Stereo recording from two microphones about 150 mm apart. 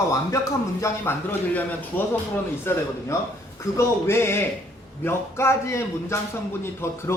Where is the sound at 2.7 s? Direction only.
15° left (ahead or behind).